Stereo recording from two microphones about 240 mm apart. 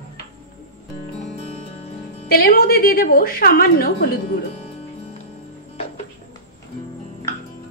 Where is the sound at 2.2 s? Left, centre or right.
Left.